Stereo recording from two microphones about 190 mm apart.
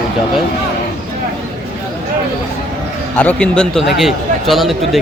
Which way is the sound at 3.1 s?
5° left (ahead or behind).